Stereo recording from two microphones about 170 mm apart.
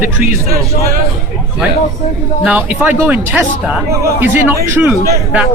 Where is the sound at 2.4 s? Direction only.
10° right (ahead or behind).